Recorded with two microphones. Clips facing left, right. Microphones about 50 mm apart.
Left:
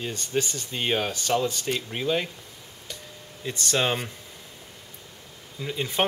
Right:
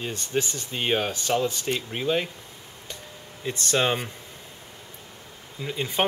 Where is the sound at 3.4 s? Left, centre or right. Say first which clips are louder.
Right 1 dB; centre.